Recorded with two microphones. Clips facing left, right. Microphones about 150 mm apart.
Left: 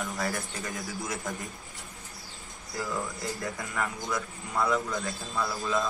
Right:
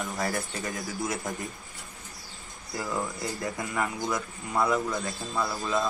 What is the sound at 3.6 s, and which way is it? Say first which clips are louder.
A man's voice: right 3 dB; 20° right (ahead or behind).